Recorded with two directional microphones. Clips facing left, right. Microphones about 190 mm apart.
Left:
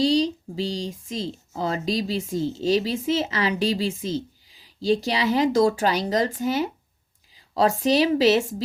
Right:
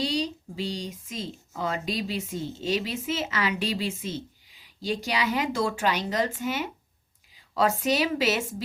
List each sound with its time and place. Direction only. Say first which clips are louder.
0.0 s speech: left 8 dB; 30° left (ahead or behind)